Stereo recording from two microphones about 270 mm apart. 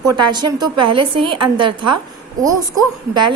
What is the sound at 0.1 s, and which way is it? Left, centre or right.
A woman's voice, centre.